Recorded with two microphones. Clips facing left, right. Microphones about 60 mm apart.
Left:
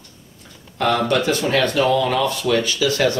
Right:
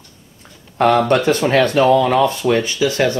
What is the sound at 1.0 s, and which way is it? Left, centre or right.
Speech, right.